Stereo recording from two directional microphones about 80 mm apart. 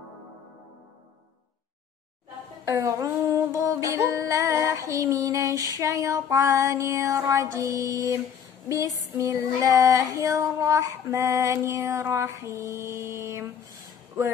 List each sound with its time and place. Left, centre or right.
2.6 s a sound: right
3.5 s music: right
4.6 s female singing: right
8.6 s child singing: right
10.1 s female singing: right